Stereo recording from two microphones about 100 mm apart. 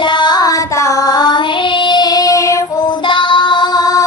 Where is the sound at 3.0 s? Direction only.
55° left (ahead or behind); by 4.1 s 40° left (ahead or behind).